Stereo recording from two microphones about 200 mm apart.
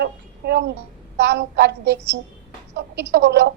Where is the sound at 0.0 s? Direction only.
55° right (ahead or behind).